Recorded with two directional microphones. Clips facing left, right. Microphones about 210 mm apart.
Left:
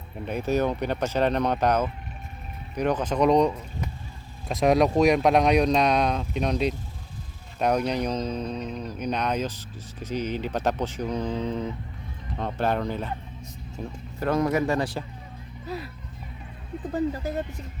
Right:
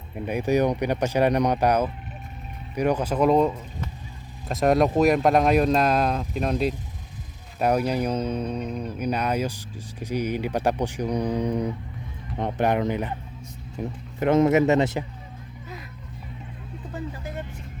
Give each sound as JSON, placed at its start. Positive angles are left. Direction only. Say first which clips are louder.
{"t": 0.3, "sound": "speech", "louder": "right 3 dB", "side_deg": -15}
{"t": 16.9, "sound": "speech", "louder": "left 8 dB", "side_deg": 35}